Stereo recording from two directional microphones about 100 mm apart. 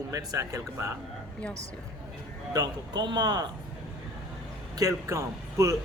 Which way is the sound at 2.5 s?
45° right (ahead or behind).